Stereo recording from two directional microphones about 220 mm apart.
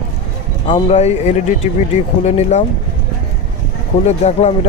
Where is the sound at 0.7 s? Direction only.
30° left (ahead or behind).